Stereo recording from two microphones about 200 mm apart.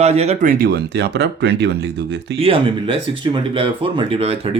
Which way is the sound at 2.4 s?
25° right (ahead or behind).